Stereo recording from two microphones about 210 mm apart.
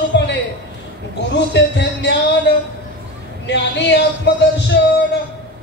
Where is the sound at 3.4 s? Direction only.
55° left (ahead or behind).